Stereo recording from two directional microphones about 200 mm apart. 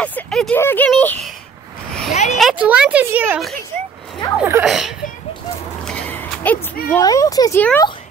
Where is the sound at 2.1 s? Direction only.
35° left (ahead or behind).